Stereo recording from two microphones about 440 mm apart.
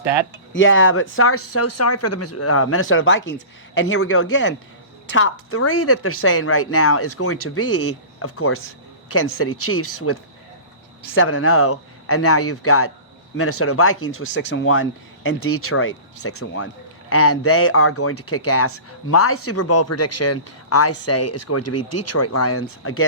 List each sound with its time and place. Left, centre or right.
0.0 s speech: centre
0.5 s speech: left